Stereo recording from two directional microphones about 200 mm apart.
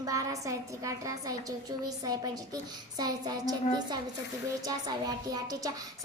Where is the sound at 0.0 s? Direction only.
15° right (ahead or behind).